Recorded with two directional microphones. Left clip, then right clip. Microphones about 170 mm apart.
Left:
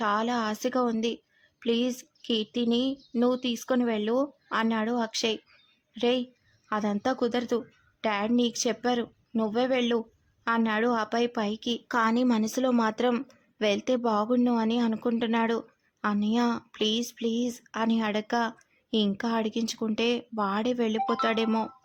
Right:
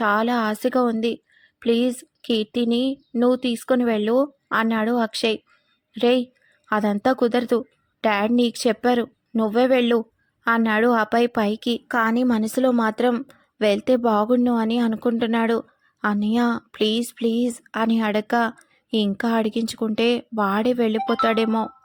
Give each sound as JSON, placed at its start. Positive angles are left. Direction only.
{"t": 0.0, "sound": "speech", "side_deg": -25}